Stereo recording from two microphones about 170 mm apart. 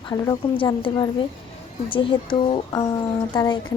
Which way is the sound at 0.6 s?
30° left (ahead or behind).